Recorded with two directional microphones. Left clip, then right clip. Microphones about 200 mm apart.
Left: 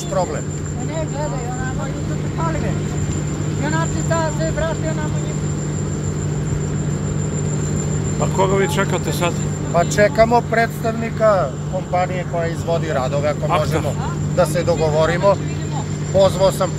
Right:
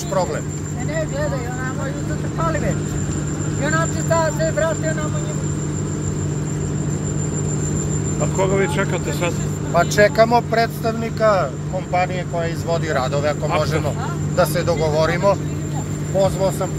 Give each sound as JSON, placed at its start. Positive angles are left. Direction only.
{"t": 3.6, "sound": "speech", "side_deg": -40}
{"t": 8.2, "sound": "speech", "side_deg": 10}
{"t": 16.2, "sound": "speech", "side_deg": 10}